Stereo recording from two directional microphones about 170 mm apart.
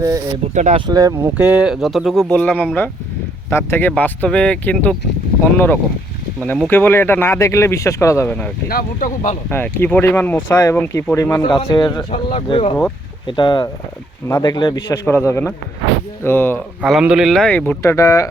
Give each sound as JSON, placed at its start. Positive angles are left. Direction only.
{"t": 0.5, "sound": "speech", "side_deg": -45}
{"t": 0.9, "sound": "speech", "side_deg": -20}
{"t": 1.4, "sound": "speech", "side_deg": -5}
{"t": 8.6, "sound": "speech", "side_deg": 55}
{"t": 9.5, "sound": "speech", "side_deg": 10}
{"t": 16.8, "sound": "speech", "side_deg": 0}